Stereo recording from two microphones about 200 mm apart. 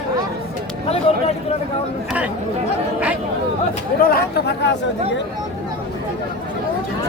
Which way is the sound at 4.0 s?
50° left (ahead or behind).